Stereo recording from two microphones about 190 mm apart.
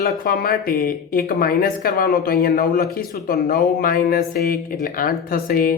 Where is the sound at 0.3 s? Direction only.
50° left (ahead or behind).